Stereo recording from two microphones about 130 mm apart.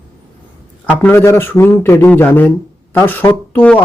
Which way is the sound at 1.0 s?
20° left (ahead or behind).